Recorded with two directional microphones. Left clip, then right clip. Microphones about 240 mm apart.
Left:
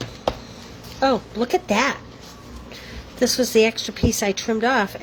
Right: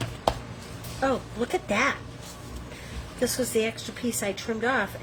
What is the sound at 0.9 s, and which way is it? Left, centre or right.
A woman's voice, left.